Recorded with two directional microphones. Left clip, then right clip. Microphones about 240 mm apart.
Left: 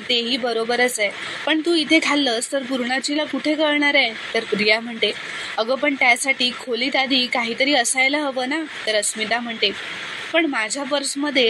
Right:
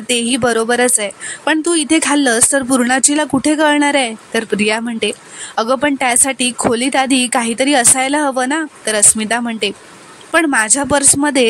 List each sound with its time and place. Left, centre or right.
0.1 s a woman's voice: right